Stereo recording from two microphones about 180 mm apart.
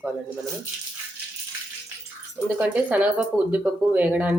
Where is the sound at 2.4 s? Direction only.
10° right (ahead or behind).